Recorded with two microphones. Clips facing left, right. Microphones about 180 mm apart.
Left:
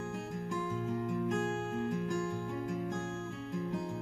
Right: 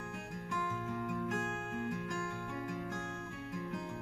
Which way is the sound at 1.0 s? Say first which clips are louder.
Left 4 dB; 30° left (ahead or behind).